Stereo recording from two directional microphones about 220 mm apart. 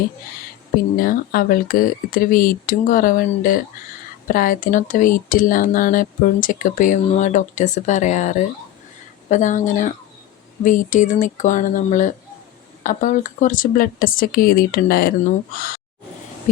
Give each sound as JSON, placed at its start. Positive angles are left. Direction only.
{"t": 0.9, "sound": "speech", "side_deg": 40}